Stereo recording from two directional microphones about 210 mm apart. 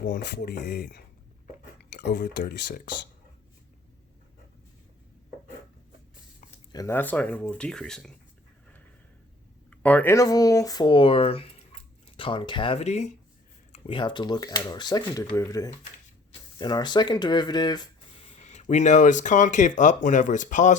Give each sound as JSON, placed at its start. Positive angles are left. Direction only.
{"t": 0.0, "sound": "speech", "side_deg": 45}
{"t": 6.7, "sound": "speech", "side_deg": 10}
{"t": 9.6, "sound": "speech", "side_deg": 5}
{"t": 18.4, "sound": "speech", "side_deg": 35}